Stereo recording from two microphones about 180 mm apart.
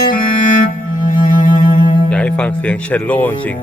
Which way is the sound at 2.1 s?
5° left (ahead or behind).